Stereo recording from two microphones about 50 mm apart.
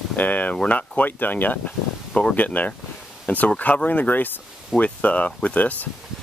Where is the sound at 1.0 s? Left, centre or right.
Left.